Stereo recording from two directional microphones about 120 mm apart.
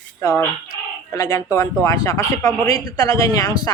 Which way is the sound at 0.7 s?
30° left (ahead or behind).